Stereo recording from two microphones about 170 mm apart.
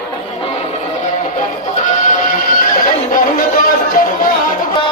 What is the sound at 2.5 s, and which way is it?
Music, 55° left (ahead or behind).